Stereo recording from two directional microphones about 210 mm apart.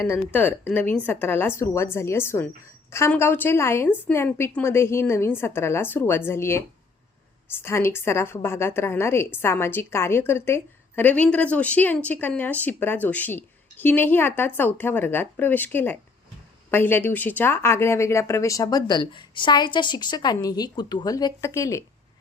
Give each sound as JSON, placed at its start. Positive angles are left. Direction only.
{"t": 0.3, "sound": "a woman's voice", "side_deg": 10}